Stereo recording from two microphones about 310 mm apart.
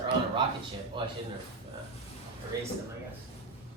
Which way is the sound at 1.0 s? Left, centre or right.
Centre.